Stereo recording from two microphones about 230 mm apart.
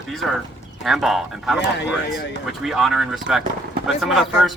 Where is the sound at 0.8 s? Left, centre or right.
Centre.